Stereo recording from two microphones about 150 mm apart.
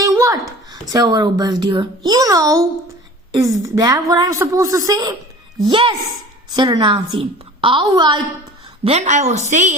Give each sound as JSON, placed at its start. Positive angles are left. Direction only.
{"t": 0.0, "sound": "a sound", "side_deg": -20}
{"t": 0.7, "sound": "a child's voice", "side_deg": -25}
{"t": 5.6, "sound": "a woman's voice", "side_deg": -35}
{"t": 8.8, "sound": "a woman's voice", "side_deg": -45}